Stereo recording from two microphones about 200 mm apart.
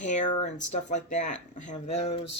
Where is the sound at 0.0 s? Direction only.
40° left (ahead or behind).